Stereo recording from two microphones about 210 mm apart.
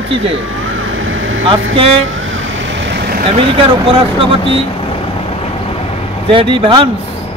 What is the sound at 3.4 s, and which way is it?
Speech, 25° right (ahead or behind).